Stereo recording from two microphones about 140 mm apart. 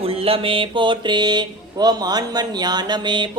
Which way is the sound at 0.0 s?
45° right (ahead or behind).